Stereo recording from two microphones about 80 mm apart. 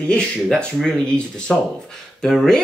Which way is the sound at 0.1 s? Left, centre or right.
Centre.